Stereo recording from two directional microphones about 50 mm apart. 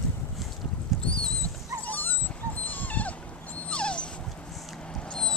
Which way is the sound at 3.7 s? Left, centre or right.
Left.